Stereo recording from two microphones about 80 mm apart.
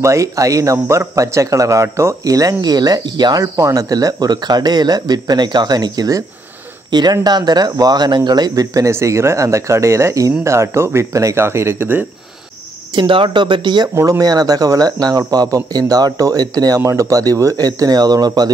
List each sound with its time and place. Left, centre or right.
0.0 s speech: right
3.5 s speech: right
8.9 s speech: right
12.9 s speech: right
14.2 s speech: right